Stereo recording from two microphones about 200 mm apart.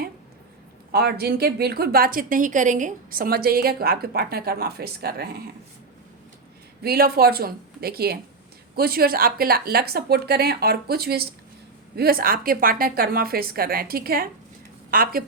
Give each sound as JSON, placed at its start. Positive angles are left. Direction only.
{"t": 0.9, "sound": "a woman's voice", "side_deg": -50}
{"t": 6.8, "sound": "a woman's voice", "side_deg": -50}